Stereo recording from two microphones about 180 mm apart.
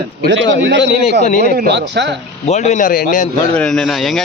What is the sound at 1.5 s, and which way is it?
Speech, 70° right (ahead or behind).